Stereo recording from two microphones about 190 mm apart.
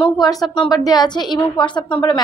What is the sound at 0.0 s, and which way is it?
A woman's voice, 25° left (ahead or behind).